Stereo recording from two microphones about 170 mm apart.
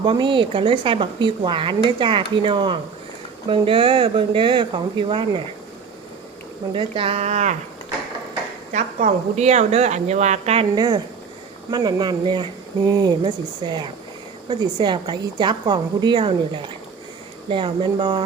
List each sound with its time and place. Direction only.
0.0 s a woman's voice: 30° right (ahead or behind)
6.7 s a woman's voice: 30° right (ahead or behind)
8.7 s a woman's voice: 45° right (ahead or behind)
10.8 s a woman's voice: 25° right (ahead or behind)